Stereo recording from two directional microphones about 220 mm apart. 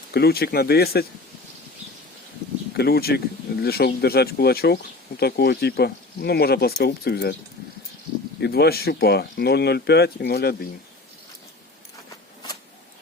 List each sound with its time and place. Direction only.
0.1 s speech: 45° left (ahead or behind)
2.7 s speech: 45° left (ahead or behind)
8.4 s speech: 45° left (ahead or behind)